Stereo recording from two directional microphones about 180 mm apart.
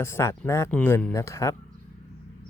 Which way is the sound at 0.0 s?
15° left (ahead or behind).